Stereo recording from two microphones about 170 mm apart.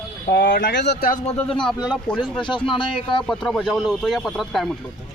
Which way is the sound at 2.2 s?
25° left (ahead or behind).